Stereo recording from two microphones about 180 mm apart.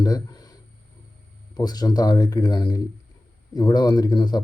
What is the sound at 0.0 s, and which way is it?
Speech, 20° left (ahead or behind).